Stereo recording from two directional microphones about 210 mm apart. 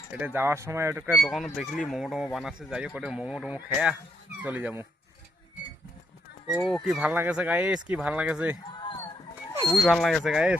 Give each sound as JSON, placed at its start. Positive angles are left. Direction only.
{"t": 0.1, "sound": "speech", "side_deg": -10}
{"t": 6.7, "sound": "speech", "side_deg": 0}
{"t": 8.8, "sound": "a sound", "side_deg": 20}
{"t": 9.8, "sound": "speech", "side_deg": 0}